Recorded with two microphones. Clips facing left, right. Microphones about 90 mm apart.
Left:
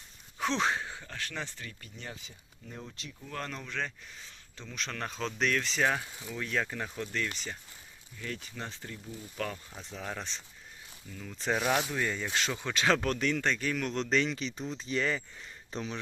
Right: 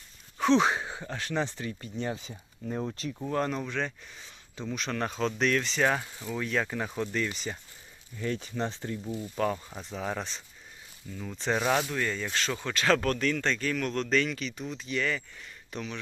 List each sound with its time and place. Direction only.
0.3 s a sound: centre (ahead or behind)
0.6 s speech: 20° right (ahead or behind); by 2.3 s 35° right (ahead or behind)
2.3 s speech: 55° right (ahead or behind)
3.3 s speech: 15° right (ahead or behind)
3.7 s speech: 5° right (ahead or behind)
8.2 s speech: 30° right (ahead or behind)
9.9 s speech: 5° right (ahead or behind)
11.3 s speech: centre (ahead or behind); by 16.0 s 30° left (ahead or behind)